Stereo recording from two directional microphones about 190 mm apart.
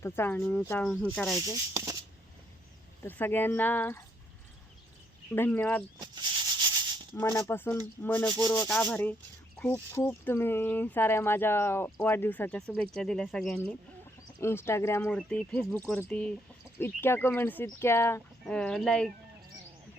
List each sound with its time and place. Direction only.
0.0 s speech: 10° left (ahead or behind)
1.7 s speech: 20° right (ahead or behind)
3.0 s speech: 10° left (ahead or behind)
5.3 s speech: 10° left (ahead or behind)
7.2 s speech: 10° left (ahead or behind)
8.6 s speech: 5° left (ahead or behind)
14.3 s speech: 15° left (ahead or behind)